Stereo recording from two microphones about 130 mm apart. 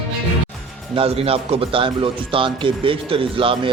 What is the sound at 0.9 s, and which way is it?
Speech, 45° right (ahead or behind).